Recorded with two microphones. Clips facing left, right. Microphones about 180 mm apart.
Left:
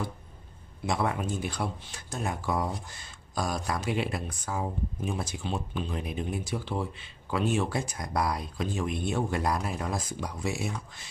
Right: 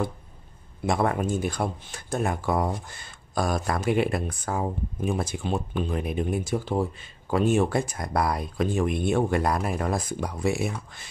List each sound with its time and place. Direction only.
0.8 s speech: 50° right (ahead or behind)